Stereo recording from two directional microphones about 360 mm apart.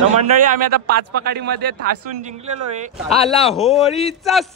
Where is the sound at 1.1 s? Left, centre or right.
Right.